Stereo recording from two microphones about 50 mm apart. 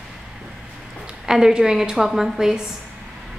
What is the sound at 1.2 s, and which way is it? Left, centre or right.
A woman's voice, centre.